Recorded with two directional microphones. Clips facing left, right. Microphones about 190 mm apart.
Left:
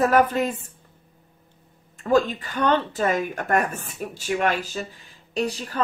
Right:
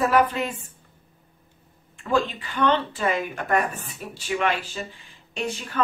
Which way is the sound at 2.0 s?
40° left (ahead or behind).